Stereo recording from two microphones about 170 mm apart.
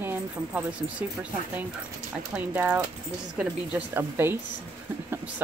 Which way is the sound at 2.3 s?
10° right (ahead or behind).